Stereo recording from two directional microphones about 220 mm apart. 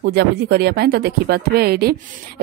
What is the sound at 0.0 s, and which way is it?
Speech, 50° right (ahead or behind).